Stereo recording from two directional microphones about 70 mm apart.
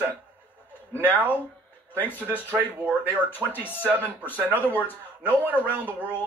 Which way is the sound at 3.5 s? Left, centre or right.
Left.